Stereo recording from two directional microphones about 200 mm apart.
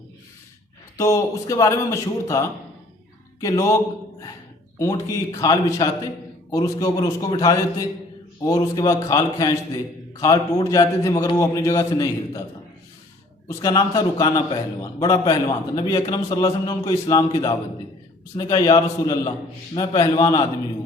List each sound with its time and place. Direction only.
0.9 s a man's voice: 15° left (ahead or behind)
4.8 s a man's voice: 15° left (ahead or behind)
13.5 s a man's voice: 15° left (ahead or behind)